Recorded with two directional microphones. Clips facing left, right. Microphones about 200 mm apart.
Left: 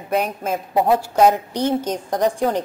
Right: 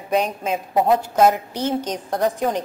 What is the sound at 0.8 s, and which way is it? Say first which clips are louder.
A woman's voice: left 1 dB; 10° left (ahead or behind).